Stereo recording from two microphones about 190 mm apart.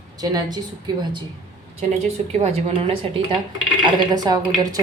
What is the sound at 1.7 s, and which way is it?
Speech, 35° right (ahead or behind).